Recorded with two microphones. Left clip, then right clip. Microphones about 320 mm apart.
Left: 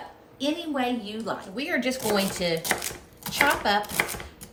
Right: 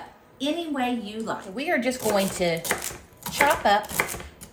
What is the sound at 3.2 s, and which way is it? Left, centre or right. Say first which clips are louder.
Chopping: even; centre.